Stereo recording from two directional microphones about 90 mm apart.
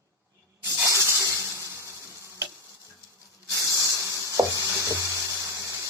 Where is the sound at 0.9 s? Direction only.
35° right (ahead or behind).